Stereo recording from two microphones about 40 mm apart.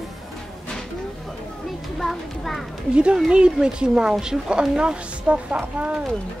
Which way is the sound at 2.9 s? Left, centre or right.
Right.